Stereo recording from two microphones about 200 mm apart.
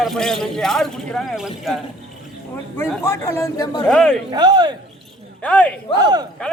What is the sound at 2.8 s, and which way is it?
Speech, 15° left (ahead or behind).